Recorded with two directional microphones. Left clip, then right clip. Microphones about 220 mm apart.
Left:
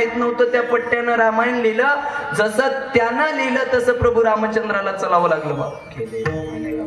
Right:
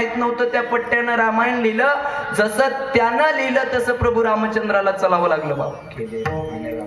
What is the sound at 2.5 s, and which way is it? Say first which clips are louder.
Speech: even; 15° right (ahead or behind).